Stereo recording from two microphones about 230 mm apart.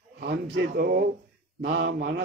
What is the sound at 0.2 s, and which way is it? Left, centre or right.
Speech, right.